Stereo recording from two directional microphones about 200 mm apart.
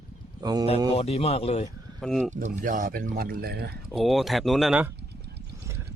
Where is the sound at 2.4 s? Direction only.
40° right (ahead or behind).